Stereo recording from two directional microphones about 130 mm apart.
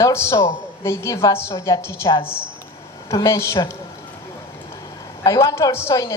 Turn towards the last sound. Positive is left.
turn(degrees=20)  # may be behind; listen again after turning